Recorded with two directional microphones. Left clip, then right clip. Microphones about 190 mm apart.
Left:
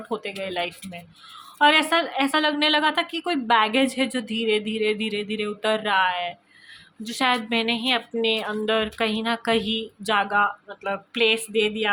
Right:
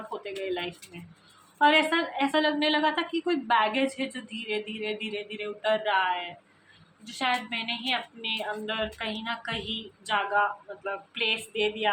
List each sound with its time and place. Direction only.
0.2 s a woman's voice: 60° left (ahead or behind)